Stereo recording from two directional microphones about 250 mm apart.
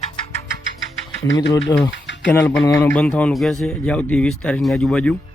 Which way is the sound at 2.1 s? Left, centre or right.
Left.